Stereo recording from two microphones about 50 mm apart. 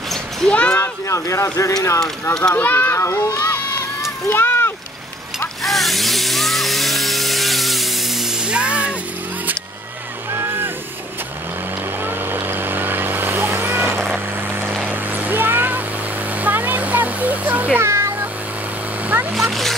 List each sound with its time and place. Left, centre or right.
0.5 s speech: left
0.7 s speech: left
2.5 s a child's voice: left
4.3 s a sound: left
5.6 s chainsaw: centre
8.5 s music: right
10.3 s vehicle: right
12.0 s vehicle: right
14.9 s a sound: right
17.7 s meow: right
19.3 s a child's voice: centre